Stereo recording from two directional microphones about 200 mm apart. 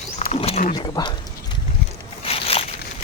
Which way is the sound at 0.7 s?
20° left (ahead or behind).